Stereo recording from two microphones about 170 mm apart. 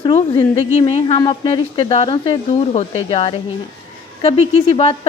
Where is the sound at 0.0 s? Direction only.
30° left (ahead or behind).